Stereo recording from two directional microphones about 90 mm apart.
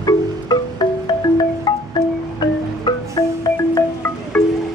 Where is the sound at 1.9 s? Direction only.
55° left (ahead or behind).